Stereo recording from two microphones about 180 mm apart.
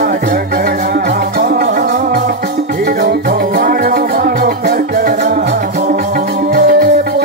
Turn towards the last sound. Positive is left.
turn(degrees=-60)  # may be behind; listen again after turning